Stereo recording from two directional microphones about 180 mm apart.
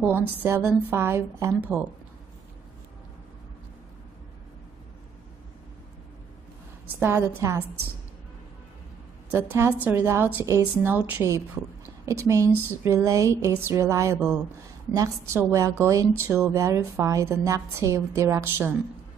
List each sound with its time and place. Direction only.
0.0 s a woman's voice: 10° right (ahead or behind)
7.0 s a woman's voice: 15° right (ahead or behind)
9.3 s a woman's voice: 15° right (ahead or behind)